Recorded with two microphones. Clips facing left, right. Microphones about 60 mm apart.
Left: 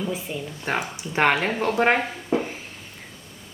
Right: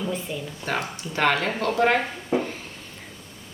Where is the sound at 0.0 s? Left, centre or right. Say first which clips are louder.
Even; centre; by 2.0 s left.